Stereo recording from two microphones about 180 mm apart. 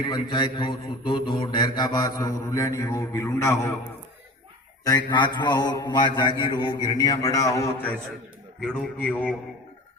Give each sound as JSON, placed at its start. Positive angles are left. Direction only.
{"t": 0.0, "sound": "speech", "side_deg": 25}
{"t": 4.8, "sound": "a man's voice", "side_deg": 20}